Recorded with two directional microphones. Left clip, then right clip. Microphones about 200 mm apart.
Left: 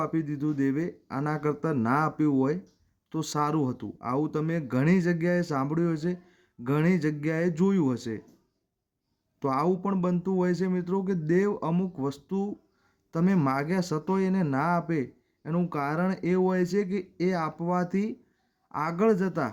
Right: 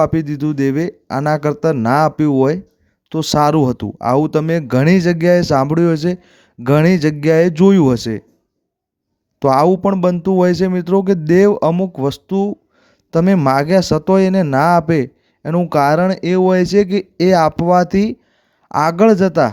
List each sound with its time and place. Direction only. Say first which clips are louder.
0.0 s speech: right 14 dB; 45° right (ahead or behind)
9.4 s speech: right 15 dB; 45° right (ahead or behind)
18.7 s speech: right 16 dB; 60° right (ahead or behind)
18.9 s speech: right 13 dB; 40° right (ahead or behind)